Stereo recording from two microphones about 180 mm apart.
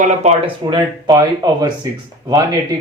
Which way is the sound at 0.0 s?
40° right (ahead or behind).